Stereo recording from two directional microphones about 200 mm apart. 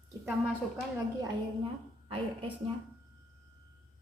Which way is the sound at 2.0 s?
25° right (ahead or behind).